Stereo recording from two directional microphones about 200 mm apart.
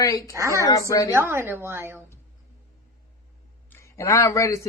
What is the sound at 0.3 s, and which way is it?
Speech, 15° right (ahead or behind).